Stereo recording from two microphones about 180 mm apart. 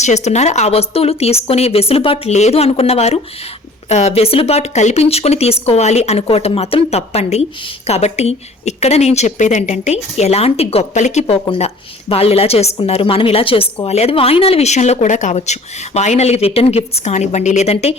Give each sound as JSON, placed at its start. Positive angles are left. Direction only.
{"t": 0.0, "sound": "speech", "side_deg": 40}